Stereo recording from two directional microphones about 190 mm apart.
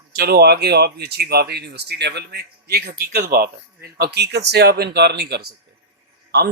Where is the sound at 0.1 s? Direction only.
55° right (ahead or behind).